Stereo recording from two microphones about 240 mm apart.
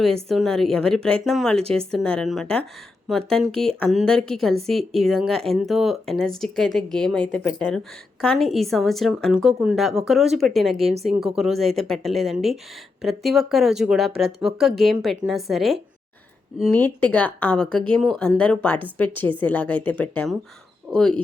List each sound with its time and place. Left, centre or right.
0.3 s speech: centre
10.8 s speech: right
11.3 s a woman's voice: centre